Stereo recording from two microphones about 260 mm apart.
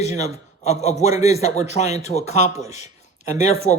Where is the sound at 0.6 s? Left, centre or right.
Left.